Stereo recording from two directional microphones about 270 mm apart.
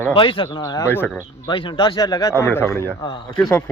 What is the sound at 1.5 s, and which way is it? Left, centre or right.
Speech, centre.